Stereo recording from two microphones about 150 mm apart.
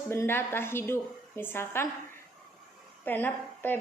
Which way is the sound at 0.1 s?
15° left (ahead or behind).